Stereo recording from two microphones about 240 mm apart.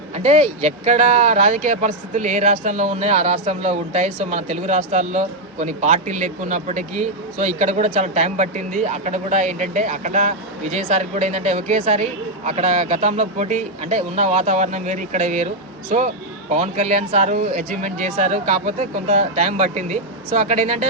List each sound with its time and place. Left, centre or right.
0.1 s speech: right